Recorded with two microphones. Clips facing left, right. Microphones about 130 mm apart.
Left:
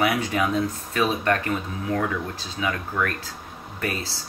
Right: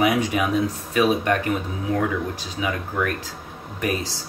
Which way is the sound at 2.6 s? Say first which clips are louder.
Even; 15° right (ahead or behind).